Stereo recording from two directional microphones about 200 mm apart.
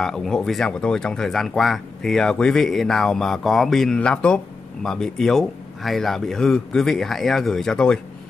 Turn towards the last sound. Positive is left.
turn(degrees=5)  # may be behind; listen again after turning